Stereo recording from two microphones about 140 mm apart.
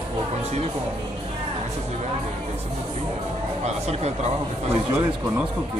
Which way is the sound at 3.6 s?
50° right (ahead or behind).